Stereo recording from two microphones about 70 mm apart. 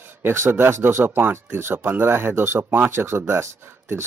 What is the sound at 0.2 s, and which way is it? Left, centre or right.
Speech, right.